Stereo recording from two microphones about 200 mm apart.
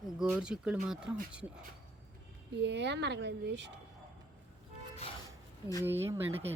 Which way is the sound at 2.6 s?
60° right (ahead or behind).